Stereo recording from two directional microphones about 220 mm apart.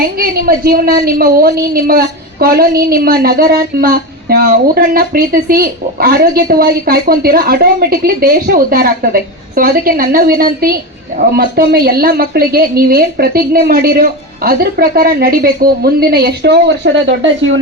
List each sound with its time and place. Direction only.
0.2 s a woman's voice: 45° right (ahead or behind)